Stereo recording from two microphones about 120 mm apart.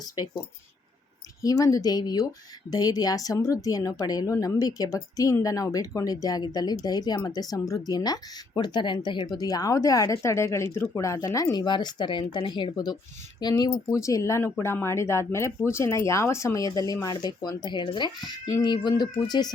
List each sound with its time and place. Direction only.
1.4 s speech: 30° left (ahead or behind)